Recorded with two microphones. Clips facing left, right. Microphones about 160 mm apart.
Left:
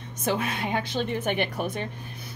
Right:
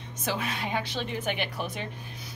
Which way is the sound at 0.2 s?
50° left (ahead or behind).